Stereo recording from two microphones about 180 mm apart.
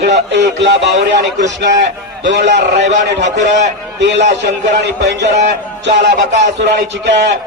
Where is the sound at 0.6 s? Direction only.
75° right (ahead or behind).